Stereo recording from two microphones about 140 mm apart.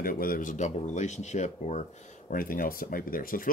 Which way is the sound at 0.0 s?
90° left.